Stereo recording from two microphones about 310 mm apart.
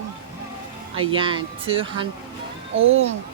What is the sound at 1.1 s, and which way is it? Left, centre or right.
Speech, centre.